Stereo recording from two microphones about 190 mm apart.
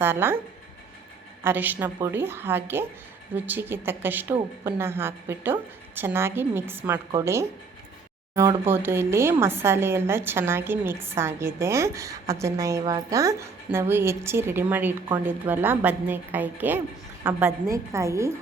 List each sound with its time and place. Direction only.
0.0 s a woman's voice: 10° right (ahead or behind)
1.5 s a woman's voice: 10° right (ahead or behind)